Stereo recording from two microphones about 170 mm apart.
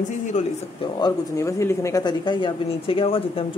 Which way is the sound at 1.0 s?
15° left (ahead or behind).